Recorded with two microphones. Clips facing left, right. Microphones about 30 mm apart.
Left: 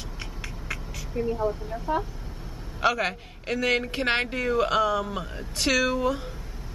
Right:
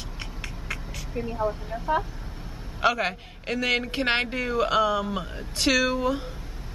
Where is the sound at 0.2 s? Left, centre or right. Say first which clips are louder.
Right 1 dB; centre.